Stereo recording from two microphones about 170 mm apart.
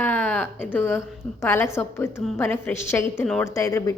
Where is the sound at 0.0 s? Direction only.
10° left (ahead or behind).